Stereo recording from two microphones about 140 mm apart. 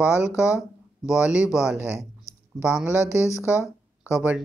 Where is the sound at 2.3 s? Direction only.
20° left (ahead or behind).